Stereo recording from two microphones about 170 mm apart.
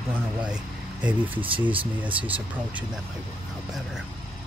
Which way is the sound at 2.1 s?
10° right (ahead or behind).